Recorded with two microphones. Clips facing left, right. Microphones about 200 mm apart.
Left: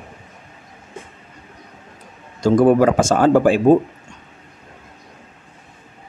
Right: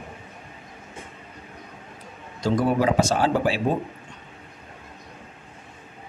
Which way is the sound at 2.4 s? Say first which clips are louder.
Left 9 dB; 50° left (ahead or behind).